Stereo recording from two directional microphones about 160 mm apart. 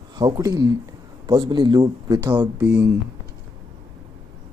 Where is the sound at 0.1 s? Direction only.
25° right (ahead or behind).